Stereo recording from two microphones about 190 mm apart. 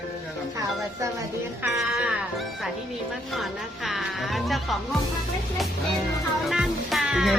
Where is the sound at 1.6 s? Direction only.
5° right (ahead or behind).